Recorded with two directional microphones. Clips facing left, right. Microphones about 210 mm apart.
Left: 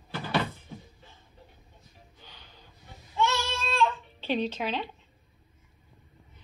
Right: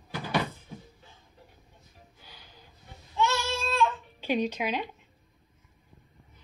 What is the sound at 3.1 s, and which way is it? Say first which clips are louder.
Babbling: even; centre (ahead or behind).